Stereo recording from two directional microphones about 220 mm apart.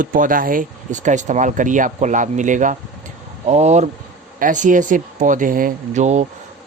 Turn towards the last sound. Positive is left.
turn(degrees=-30)  # may be behind; listen again after turning